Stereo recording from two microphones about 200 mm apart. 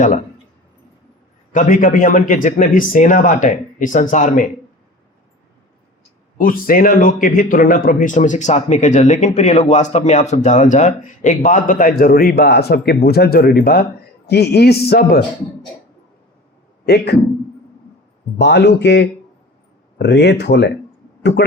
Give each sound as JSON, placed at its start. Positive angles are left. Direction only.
{"t": 1.5, "sound": "speech", "side_deg": 40}
{"t": 6.3, "sound": "a man's voice", "side_deg": 45}
{"t": 16.8, "sound": "a man's voice", "side_deg": 55}
{"t": 18.3, "sound": "speech", "side_deg": 55}